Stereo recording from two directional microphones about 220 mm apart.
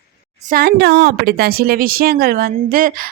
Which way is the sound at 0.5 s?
45° right (ahead or behind).